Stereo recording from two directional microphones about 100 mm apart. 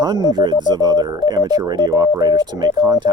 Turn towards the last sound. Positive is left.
turn(degrees=-45)  # may be behind; listen again after turning